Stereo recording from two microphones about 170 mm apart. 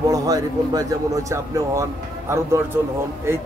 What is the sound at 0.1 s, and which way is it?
Speech, 20° right (ahead or behind).